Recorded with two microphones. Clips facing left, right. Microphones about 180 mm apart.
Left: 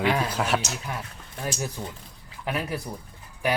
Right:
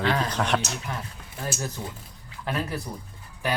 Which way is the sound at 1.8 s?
5° right (ahead or behind).